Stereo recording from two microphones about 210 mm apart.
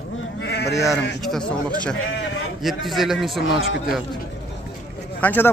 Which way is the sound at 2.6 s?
Centre (ahead or behind).